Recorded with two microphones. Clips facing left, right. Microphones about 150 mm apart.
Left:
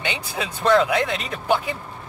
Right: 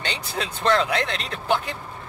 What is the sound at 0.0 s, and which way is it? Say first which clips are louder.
Speech: left 1 dB; 10° left (ahead or behind).